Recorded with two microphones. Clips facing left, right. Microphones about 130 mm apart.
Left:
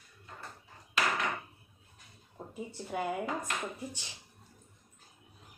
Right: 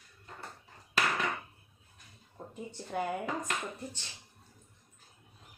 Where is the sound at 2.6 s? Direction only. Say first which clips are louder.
Even; 5° left (ahead or behind).